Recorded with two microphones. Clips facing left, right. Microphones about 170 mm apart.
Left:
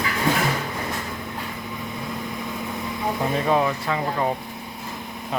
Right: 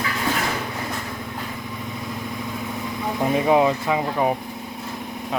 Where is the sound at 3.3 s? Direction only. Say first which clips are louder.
Right 5 dB; 20° right (ahead or behind).